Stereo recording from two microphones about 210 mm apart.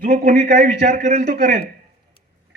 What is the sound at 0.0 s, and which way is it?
A man's voice, 40° right (ahead or behind).